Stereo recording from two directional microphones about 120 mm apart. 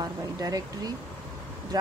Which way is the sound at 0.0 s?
30° right (ahead or behind).